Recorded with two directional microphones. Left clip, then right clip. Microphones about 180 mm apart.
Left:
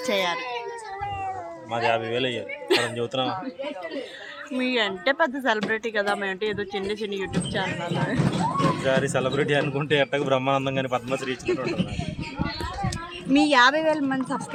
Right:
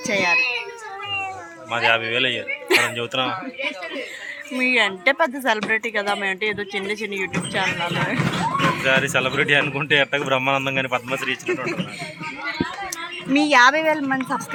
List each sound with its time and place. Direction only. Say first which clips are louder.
0.1 s speech: right 5 dB; 10° right (ahead or behind)
1.7 s speech: right 5 dB; 10° left (ahead or behind)
2.6 s throat clearing: right 5 dB; 10° right (ahead or behind)
3.0 s speech: right 3 dB; 15° left (ahead or behind)
4.5 s speech: right 6 dB; 15° right (ahead or behind)
8.8 s speech: right 4 dB; 15° left (ahead or behind)
13.3 s speech: right 3 dB; 10° right (ahead or behind)